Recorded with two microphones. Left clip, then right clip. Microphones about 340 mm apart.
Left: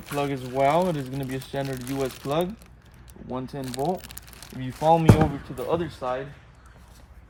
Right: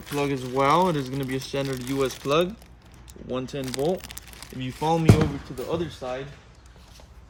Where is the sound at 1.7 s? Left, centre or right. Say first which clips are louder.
Right 3 dB; centre.